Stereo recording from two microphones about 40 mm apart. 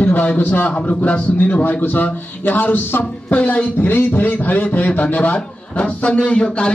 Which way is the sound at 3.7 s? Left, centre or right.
Left.